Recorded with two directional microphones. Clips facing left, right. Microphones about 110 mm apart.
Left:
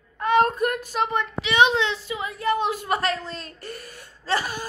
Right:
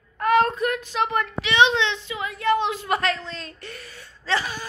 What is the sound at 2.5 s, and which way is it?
A woman's voice, 40° left (ahead or behind).